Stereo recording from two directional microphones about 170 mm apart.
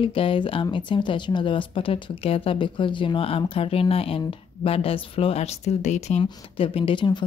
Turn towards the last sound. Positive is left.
turn(degrees=30)  # may be behind; listen again after turning